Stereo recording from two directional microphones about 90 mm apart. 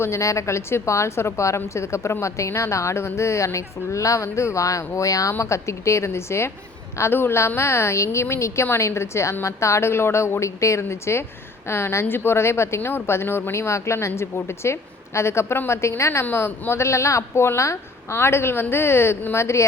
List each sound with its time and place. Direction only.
0.0 s a woman's voice: 35° left (ahead or behind)